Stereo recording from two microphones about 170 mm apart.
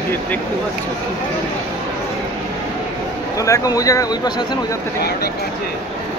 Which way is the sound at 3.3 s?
20° left (ahead or behind).